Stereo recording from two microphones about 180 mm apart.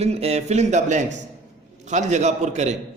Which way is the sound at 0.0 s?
35° right (ahead or behind).